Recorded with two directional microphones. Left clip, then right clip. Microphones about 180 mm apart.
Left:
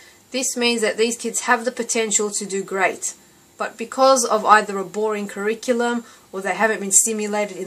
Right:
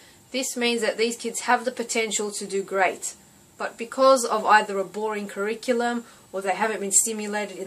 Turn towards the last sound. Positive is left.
turn(degrees=45)  # may be behind; listen again after turning